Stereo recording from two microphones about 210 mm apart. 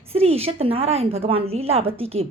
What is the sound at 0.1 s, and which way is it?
A woman's voice, 30° right (ahead or behind).